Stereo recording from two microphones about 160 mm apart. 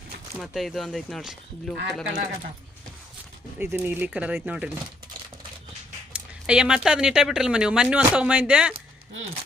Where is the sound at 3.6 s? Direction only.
15° right (ahead or behind).